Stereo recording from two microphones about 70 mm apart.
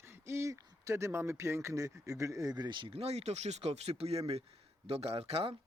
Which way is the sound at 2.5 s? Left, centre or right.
Right.